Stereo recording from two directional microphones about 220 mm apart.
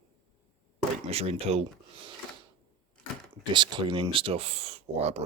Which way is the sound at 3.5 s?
20° right (ahead or behind).